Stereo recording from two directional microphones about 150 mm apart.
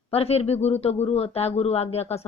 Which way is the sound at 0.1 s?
45° left (ahead or behind).